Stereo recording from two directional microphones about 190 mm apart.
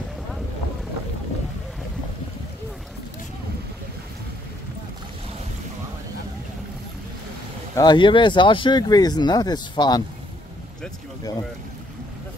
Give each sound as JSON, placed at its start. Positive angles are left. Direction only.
{"t": 7.7, "sound": "speech", "side_deg": 20}